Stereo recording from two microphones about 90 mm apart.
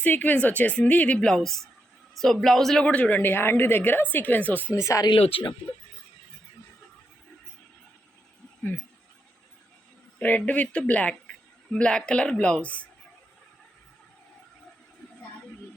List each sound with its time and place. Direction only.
0.0 s a woman's voice: 20° left (ahead or behind); by 2.8 s 5° left (ahead or behind)
2.8 s a woman's voice: 15° left (ahead or behind)
4.7 s speech: 35° left (ahead or behind)
5.0 s speech: 60° left (ahead or behind)
10.2 s a woman's voice: 20° left (ahead or behind)